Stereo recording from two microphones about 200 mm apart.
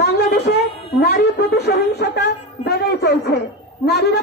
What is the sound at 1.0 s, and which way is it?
Speech, 55° left (ahead or behind).